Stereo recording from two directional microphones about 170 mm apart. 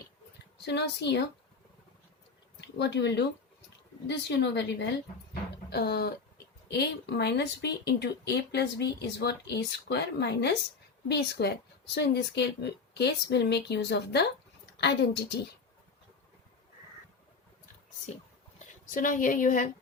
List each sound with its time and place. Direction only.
0.6 s a woman's voice: 85° left
2.6 s a woman's voice: 80° left
5.7 s speech: 65° left (ahead or behind)
6.7 s a woman's voice: 75° left (ahead or behind)
18.9 s a woman's voice: 50° left (ahead or behind)